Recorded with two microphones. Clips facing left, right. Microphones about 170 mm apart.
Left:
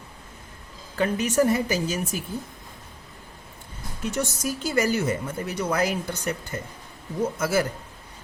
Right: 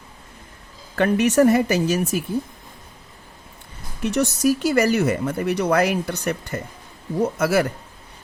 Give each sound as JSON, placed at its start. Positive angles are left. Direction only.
{"t": 0.9, "sound": "speech", "side_deg": -70}
{"t": 4.0, "sound": "speech", "side_deg": -70}